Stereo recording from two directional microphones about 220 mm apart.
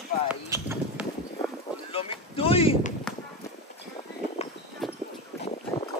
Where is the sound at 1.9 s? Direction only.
25° left (ahead or behind).